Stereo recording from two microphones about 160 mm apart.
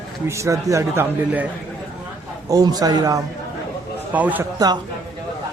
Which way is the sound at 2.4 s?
25° right (ahead or behind).